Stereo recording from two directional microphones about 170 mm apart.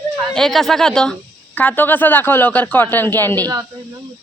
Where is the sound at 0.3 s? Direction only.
Centre (ahead or behind).